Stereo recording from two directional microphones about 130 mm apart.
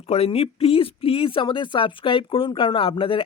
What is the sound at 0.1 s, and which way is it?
Speech, 50° left (ahead or behind).